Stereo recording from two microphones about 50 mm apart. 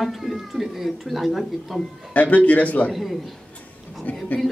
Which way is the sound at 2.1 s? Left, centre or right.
Left.